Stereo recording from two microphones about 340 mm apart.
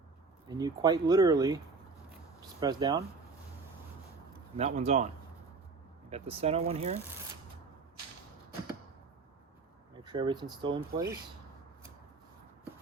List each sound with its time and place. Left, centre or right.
0.4 s speech: centre
4.5 s speech: centre
6.1 s speech: centre
10.0 s speech: centre